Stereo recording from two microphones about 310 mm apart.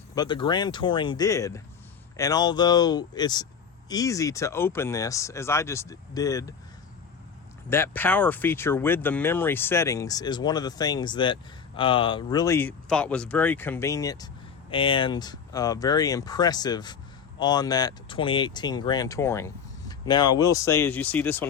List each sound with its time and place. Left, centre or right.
0.1 s speech: centre
7.7 s speech: centre